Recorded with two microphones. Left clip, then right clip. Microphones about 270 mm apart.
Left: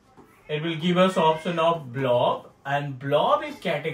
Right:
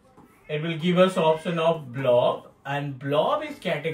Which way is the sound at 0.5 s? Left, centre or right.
Centre.